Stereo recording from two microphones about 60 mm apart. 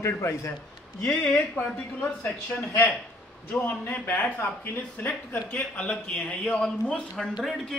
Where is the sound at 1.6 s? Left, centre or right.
Left.